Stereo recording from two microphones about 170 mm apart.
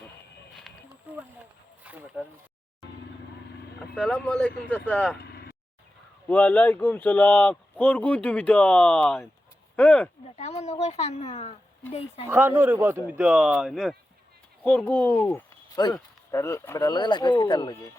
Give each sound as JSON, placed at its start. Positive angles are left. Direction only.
{"t": 1.8, "sound": "speech", "side_deg": -10}
{"t": 3.9, "sound": "speech", "side_deg": 5}
{"t": 5.1, "sound": "vehicle", "side_deg": 70}
{"t": 6.2, "sound": "speech", "side_deg": 10}
{"t": 10.2, "sound": "speech", "side_deg": 40}
{"t": 12.3, "sound": "a man's voice", "side_deg": -10}
{"t": 14.8, "sound": "speech", "side_deg": 10}